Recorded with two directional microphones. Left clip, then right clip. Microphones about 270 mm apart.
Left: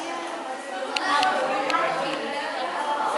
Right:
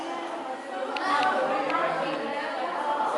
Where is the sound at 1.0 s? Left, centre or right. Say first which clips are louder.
Left 2 dB; centre.